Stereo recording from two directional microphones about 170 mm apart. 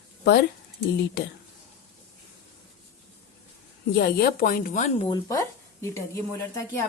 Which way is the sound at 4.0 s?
70° left (ahead or behind).